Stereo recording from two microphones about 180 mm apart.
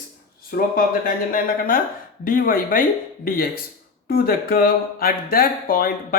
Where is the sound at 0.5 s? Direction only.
50° left (ahead or behind).